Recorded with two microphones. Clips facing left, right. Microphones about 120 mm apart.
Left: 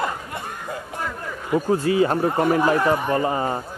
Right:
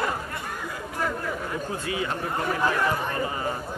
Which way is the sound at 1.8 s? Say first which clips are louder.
Left 10 dB; 35° left (ahead or behind).